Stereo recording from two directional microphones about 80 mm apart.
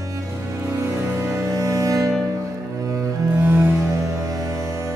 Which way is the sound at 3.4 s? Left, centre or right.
Right.